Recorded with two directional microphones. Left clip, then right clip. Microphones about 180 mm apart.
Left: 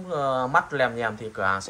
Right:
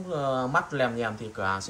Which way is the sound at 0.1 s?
15° right (ahead or behind).